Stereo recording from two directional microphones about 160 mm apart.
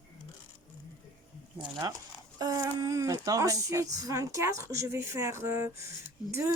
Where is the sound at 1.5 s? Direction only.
25° right (ahead or behind).